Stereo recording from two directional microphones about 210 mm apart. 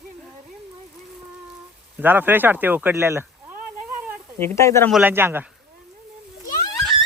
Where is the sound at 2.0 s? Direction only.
10° right (ahead or behind).